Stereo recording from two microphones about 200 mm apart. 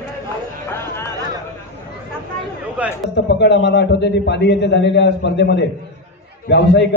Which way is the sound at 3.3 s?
60° left (ahead or behind).